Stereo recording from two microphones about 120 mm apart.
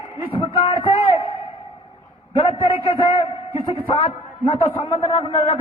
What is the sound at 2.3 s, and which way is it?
A man's voice, 50° left (ahead or behind).